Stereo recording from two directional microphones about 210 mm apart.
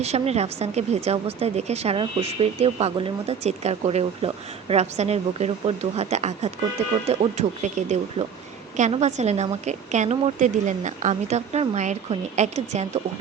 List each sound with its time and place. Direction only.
0.0 s a woman's voice: 30° right (ahead or behind)
8.7 s a woman's voice: 35° right (ahead or behind)